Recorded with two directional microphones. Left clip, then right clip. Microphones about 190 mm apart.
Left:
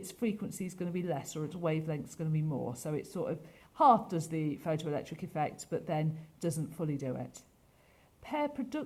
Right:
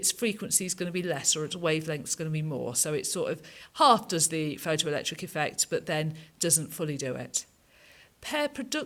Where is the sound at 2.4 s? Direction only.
45° right (ahead or behind).